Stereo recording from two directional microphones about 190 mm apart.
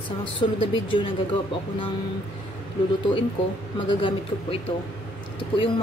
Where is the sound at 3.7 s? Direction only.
25° left (ahead or behind).